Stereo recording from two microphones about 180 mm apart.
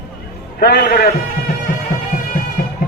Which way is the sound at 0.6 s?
60° left (ahead or behind).